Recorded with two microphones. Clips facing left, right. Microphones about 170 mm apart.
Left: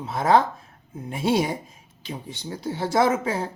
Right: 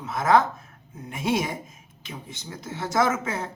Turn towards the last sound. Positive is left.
turn(degrees=30)  # may be behind; listen again after turning